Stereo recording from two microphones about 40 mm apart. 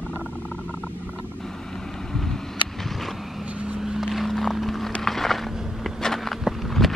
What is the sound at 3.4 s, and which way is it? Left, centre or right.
Vehicle, right.